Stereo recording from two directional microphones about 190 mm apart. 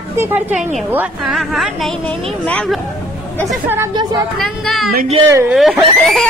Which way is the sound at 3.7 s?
20° right (ahead or behind).